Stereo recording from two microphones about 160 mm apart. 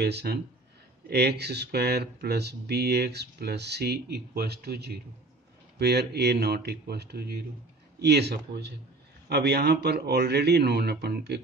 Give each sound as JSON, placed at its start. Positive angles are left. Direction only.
{"t": 0.0, "sound": "speech", "side_deg": -90}